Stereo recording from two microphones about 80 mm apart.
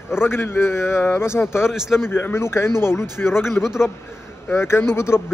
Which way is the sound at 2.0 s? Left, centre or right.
Left.